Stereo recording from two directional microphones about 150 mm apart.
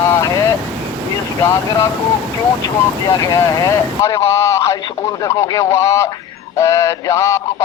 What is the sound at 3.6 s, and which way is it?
A man's voice, 20° left (ahead or behind).